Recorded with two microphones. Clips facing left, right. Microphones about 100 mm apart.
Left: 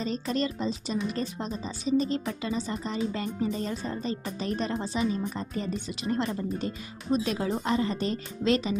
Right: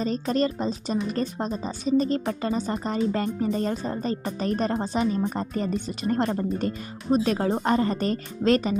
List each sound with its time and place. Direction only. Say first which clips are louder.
0.0 s speech: right 5 dB; 40° right (ahead or behind)